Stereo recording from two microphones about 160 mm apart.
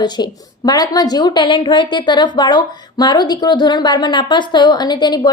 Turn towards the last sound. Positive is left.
turn(degrees=25)  # may be behind; listen again after turning